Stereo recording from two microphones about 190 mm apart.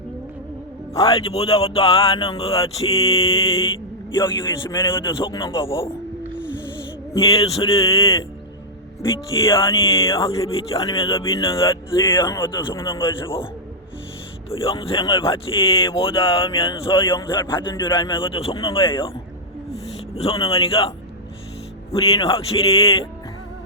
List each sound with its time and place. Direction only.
1.0 s speech: 30° left (ahead or behind)
7.1 s speech: 30° left (ahead or behind)
7.9 s speech: 15° left (ahead or behind)
9.5 s speech: 25° left (ahead or behind)
11.6 s speech: 15° left (ahead or behind)
14.5 s speech: 30° left (ahead or behind)
20.1 s speech: 30° left (ahead or behind)
21.9 s speech: 20° left (ahead or behind)